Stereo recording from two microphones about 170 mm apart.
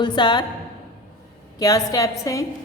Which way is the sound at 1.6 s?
20° left (ahead or behind).